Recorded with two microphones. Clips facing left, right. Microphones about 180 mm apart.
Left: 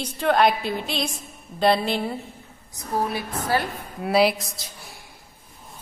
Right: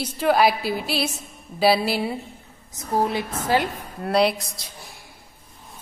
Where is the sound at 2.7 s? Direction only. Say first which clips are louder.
Right 3 dB; 20° right (ahead or behind).